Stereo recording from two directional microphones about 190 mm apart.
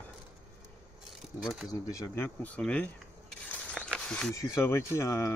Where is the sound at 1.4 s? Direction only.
Centre (ahead or behind).